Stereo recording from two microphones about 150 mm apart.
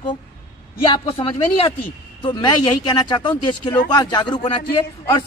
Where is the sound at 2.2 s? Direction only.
30° left (ahead or behind).